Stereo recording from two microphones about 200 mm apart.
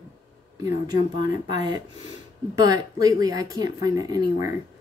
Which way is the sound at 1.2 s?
20° right (ahead or behind).